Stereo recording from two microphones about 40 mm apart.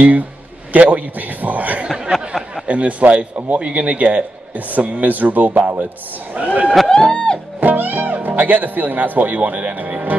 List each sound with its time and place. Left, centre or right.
0.7 s a man's voice: right
6.9 s music: left
7.6 s speech: right